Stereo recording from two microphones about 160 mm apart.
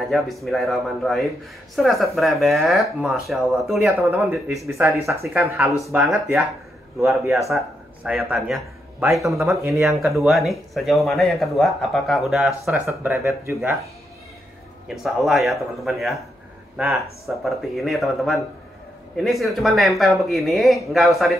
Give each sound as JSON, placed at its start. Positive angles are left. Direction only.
{"t": 0.1, "sound": "speech", "side_deg": 0}
{"t": 4.1, "sound": "speech", "side_deg": -10}
{"t": 5.4, "sound": "speech", "side_deg": 0}
{"t": 7.3, "sound": "speech", "side_deg": -20}
{"t": 8.0, "sound": "speech", "side_deg": -5}
{"t": 9.6, "sound": "speech", "side_deg": -20}
{"t": 9.8, "sound": "speech", "side_deg": 0}
{"t": 12.6, "sound": "speech", "side_deg": -15}
{"t": 14.9, "sound": "speech", "side_deg": 0}